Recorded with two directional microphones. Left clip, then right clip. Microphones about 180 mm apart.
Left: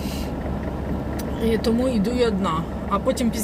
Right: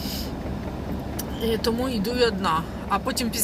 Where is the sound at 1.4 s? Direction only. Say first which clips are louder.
Left 2 dB; 50° right (ahead or behind).